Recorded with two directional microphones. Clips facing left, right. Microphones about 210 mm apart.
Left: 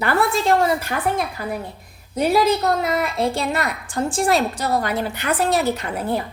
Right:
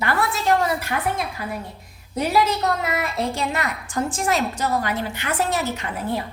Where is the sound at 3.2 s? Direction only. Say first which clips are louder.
Left 3 dB; 35° left (ahead or behind).